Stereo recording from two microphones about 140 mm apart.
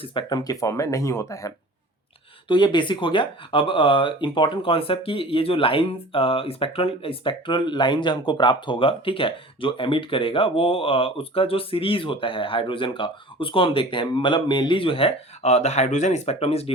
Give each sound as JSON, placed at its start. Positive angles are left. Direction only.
{"t": 0.0, "sound": "speech", "side_deg": 35}
{"t": 2.5, "sound": "speech", "side_deg": 35}